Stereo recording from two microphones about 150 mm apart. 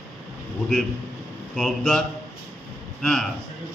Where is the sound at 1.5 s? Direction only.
Centre (ahead or behind).